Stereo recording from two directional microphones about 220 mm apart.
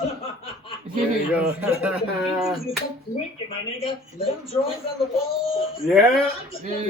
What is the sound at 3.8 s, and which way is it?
Speech, 25° left (ahead or behind).